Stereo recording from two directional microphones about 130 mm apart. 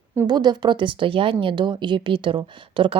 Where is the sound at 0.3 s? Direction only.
30° right (ahead or behind).